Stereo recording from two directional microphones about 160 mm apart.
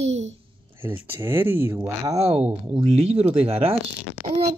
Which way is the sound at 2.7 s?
40° right (ahead or behind).